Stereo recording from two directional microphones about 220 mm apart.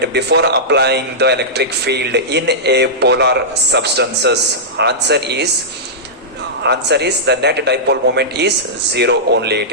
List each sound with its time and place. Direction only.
0.0 s a man's voice: 50° right (ahead or behind)
6.6 s a man's voice: 50° right (ahead or behind)